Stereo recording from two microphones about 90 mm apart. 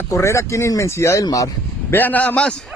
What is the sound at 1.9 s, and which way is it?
Speech, 20° left (ahead or behind).